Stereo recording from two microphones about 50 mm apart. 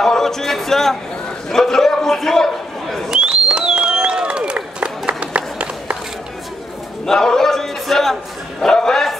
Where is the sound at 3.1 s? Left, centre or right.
Centre.